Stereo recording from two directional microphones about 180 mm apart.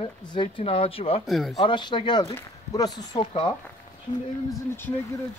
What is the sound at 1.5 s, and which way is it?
Speech, 25° left (ahead or behind).